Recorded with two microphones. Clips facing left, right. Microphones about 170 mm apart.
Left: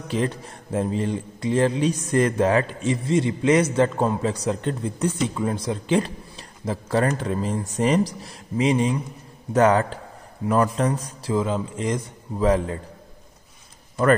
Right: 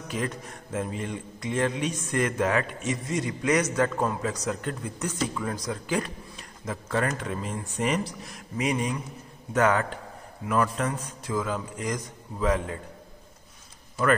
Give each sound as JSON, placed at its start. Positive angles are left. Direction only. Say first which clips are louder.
{"t": 0.1, "sound": "speech", "louder": "left 6 dB", "side_deg": 30}